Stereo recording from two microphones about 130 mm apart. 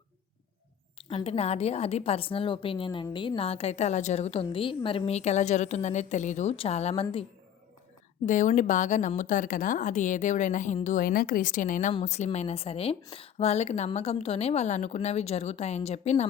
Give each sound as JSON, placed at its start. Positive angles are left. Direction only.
{"t": 0.9, "sound": "a woman's voice", "side_deg": 50}
{"t": 8.3, "sound": "a woman's voice", "side_deg": 75}
{"t": 10.8, "sound": "speech", "side_deg": 90}
{"t": 12.0, "sound": "a woman's voice", "side_deg": 60}